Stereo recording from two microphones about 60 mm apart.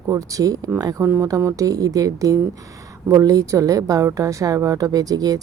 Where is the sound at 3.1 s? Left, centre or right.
Right.